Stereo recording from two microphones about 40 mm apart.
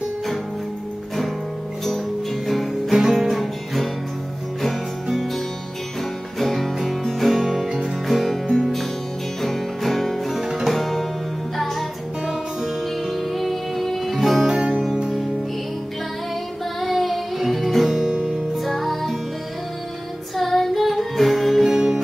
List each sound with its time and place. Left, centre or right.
2.4 s music: centre
5.0 s music: centre
6.3 s music: centre
8.1 s music: centre
13.1 s music: centre
14.5 s music: centre
16.8 s music: centre
18.1 s music: right
18.6 s music: centre
20.3 s music: centre